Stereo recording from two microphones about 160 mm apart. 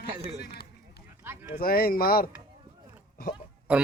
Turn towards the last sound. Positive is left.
turn(degrees=-5)  # may be behind; listen again after turning